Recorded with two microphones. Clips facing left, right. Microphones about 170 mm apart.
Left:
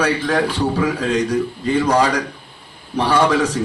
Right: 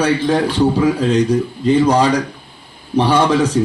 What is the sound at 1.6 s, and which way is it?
A man's voice, 20° right (ahead or behind).